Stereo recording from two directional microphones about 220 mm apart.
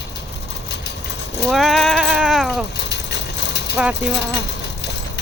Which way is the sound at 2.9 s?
50° left (ahead or behind).